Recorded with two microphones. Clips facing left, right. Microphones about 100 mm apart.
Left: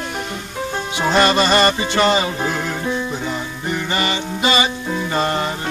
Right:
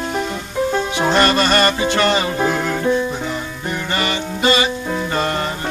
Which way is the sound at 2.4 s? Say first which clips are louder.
Right 4 dB; 15° right (ahead or behind).